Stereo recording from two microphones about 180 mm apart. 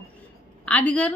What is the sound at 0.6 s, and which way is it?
Speech, 5° left (ahead or behind).